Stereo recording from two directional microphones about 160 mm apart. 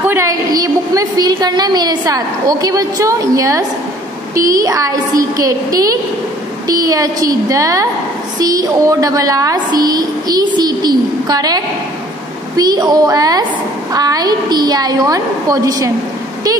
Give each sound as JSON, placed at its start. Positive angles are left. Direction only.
{"t": 0.1, "sound": "a woman's voice", "side_deg": -20}